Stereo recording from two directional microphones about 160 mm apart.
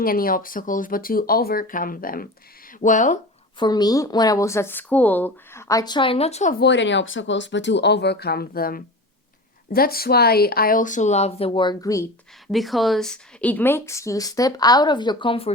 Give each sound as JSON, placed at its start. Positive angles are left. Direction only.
{"t": 0.0, "sound": "speech", "side_deg": 65}
{"t": 2.8, "sound": "speech", "side_deg": 50}
{"t": 3.6, "sound": "speech", "side_deg": 25}
{"t": 6.5, "sound": "speech", "side_deg": 90}
{"t": 12.5, "sound": "speech", "side_deg": 0}